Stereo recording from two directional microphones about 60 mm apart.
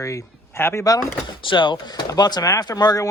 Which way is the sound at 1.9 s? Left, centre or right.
Left.